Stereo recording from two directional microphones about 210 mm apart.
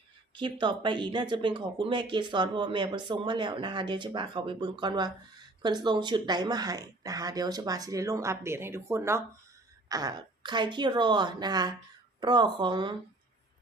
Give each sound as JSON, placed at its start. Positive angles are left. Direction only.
{"t": 0.3, "sound": "speech", "side_deg": -25}